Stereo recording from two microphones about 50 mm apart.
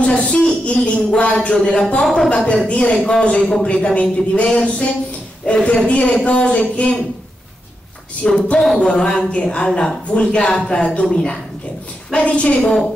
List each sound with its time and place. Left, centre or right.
0.0 s a sound: left
0.8 s speech: centre
2.3 s speech: centre
8.2 s speech: centre
12.6 s speech: centre